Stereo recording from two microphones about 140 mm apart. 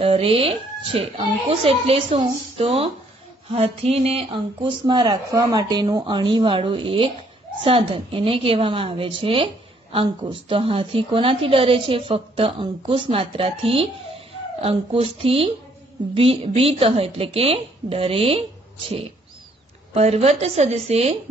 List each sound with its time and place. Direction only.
0.0 s a woman's voice: 45° right (ahead or behind)
19.9 s a woman's voice: 50° right (ahead or behind)